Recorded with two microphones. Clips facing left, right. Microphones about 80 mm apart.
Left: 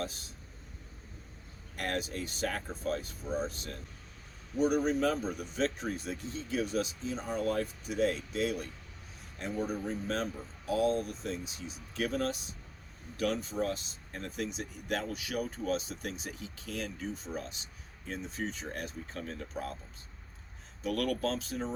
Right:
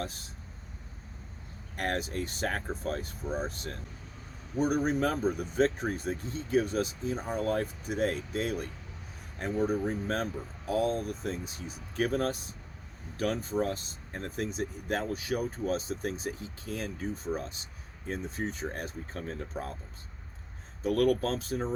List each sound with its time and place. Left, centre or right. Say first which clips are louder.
1.7 s speech: right 3 dB; right
4.6 s speech: even; right
20.8 s speech: right 5 dB; right